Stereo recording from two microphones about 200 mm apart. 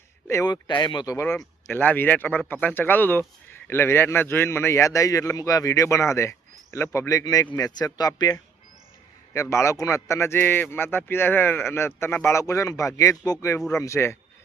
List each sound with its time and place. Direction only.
0.3 s speech: 15° left (ahead or behind)